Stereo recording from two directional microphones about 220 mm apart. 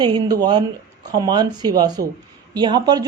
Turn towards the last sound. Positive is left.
turn(degrees=-20)  # may be behind; listen again after turning